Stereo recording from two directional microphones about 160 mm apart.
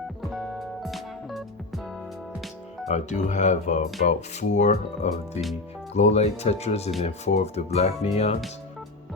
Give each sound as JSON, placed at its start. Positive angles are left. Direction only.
{"t": 0.2, "sound": "music", "side_deg": 0}
{"t": 2.8, "sound": "speech", "side_deg": 45}